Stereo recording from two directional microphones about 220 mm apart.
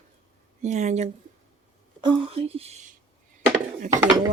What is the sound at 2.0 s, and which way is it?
Dishes, 25° right (ahead or behind).